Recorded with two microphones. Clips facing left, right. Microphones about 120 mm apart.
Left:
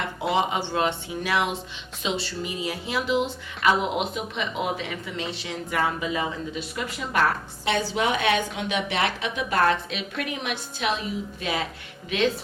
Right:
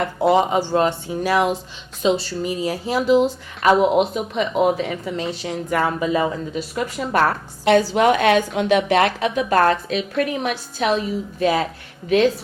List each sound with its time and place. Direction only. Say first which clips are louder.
0.3 s a woman's voice: right 7 dB; 40° right (ahead or behind)